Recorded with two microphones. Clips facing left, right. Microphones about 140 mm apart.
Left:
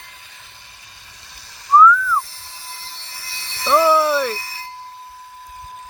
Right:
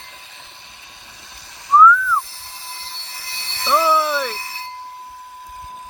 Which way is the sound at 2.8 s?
15° right (ahead or behind).